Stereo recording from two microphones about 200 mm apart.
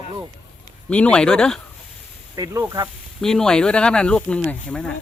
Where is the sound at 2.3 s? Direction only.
15° right (ahead or behind).